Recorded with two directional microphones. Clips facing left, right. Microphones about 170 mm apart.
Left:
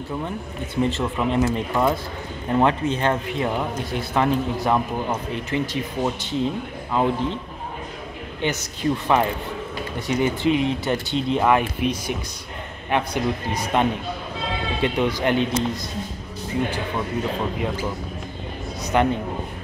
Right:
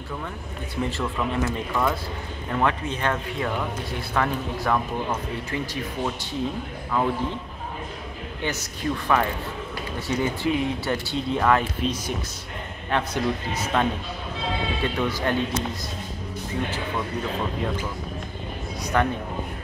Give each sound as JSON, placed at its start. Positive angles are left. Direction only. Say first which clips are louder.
{"t": 0.8, "sound": "speech", "louder": "left 3 dB", "side_deg": 20}
{"t": 8.4, "sound": "speech", "louder": "left 4 dB", "side_deg": 20}
{"t": 11.8, "sound": "speech", "louder": "left 3 dB", "side_deg": 65}
{"t": 12.9, "sound": "speech", "louder": "left 2 dB", "side_deg": 15}
{"t": 18.9, "sound": "speech", "louder": "left 3 dB", "side_deg": 20}